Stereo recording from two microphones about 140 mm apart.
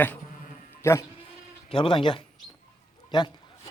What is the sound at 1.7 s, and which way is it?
Speech, 40° left (ahead or behind).